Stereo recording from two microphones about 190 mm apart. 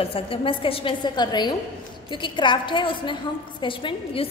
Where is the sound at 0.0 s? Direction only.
30° left (ahead or behind).